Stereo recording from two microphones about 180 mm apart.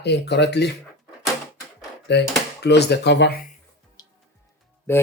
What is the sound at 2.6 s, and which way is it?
Speech, 65° left (ahead or behind).